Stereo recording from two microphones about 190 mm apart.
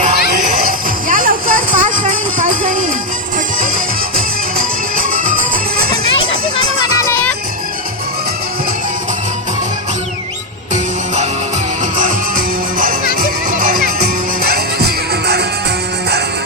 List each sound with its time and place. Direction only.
0.3 s music: 45° right (ahead or behind)
4.5 s music: 45° right (ahead or behind)
13.1 s music: 45° right (ahead or behind)